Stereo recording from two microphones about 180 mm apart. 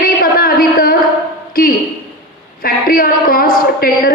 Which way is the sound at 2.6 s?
55° left (ahead or behind).